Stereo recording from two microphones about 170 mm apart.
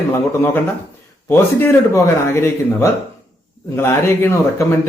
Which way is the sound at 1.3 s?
15° left (ahead or behind).